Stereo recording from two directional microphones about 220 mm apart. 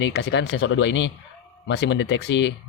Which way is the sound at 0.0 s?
50° left (ahead or behind).